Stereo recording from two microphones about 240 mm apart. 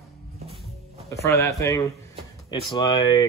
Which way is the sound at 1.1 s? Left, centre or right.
Centre.